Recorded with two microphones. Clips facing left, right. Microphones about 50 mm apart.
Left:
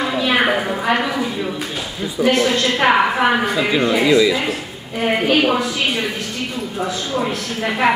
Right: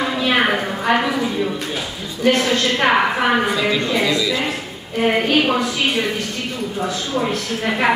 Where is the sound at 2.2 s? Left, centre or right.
Centre.